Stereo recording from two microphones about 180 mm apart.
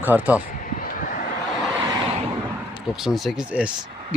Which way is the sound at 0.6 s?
50° left (ahead or behind).